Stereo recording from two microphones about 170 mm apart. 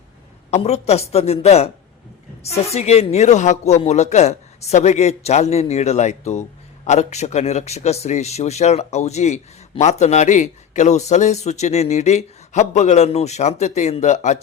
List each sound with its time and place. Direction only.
0.5 s speech: 40° left (ahead or behind)
2.7 s speech: 40° left (ahead or behind)